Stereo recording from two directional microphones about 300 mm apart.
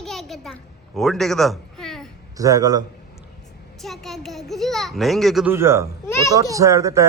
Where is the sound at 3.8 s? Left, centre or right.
Centre.